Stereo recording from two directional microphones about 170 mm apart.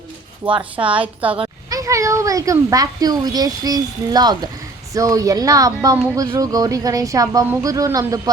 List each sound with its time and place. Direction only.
0.8 s a woman's voice: 30° right (ahead or behind)
1.0 s a woman's voice: 10° right (ahead or behind)
1.7 s speech: 20° right (ahead or behind)